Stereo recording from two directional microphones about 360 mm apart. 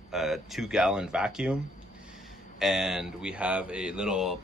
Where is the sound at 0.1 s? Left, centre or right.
Centre.